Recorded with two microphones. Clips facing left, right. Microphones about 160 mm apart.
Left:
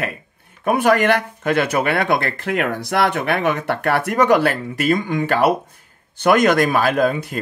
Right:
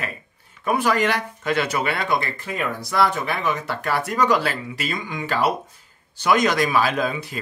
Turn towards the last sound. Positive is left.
turn(degrees=50)  # may be behind; listen again after turning